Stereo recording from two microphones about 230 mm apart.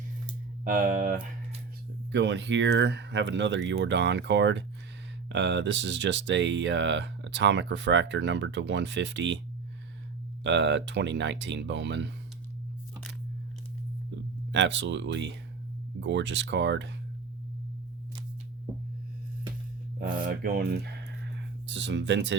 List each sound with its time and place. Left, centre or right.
0.6 s speech: right
2.1 s speech: right
10.4 s speech: right
14.5 s speech: right
20.0 s speech: right